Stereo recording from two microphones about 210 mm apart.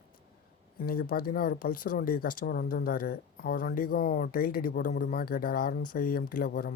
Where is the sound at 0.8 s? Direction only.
45° left (ahead or behind).